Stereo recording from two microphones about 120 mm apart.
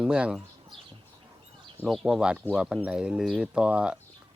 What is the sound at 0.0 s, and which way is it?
Speech, 10° right (ahead or behind).